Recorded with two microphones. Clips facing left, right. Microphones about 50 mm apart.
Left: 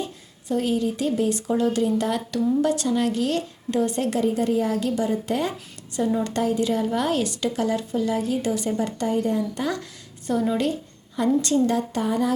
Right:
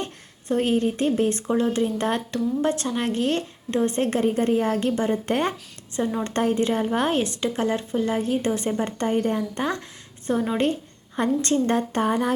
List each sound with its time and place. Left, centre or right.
0.0 s speech: right
1.5 s a woman's voice: right
11.2 s speech: right